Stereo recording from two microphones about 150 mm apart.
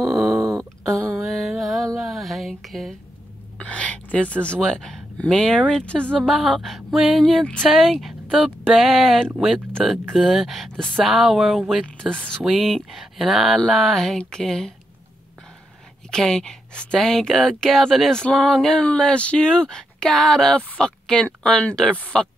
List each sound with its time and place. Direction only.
0.0 s a sound: 20° right (ahead or behind)
1.3 s music: centre (ahead or behind)
3.5 s speech: 10° left (ahead or behind)
16.1 s speech: 5° left (ahead or behind)